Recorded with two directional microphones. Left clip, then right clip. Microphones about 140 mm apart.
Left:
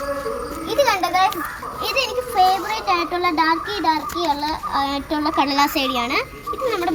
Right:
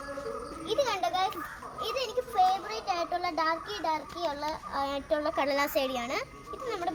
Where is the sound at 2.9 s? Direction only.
35° right (ahead or behind).